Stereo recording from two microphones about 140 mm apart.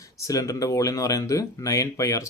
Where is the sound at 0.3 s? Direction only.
25° left (ahead or behind).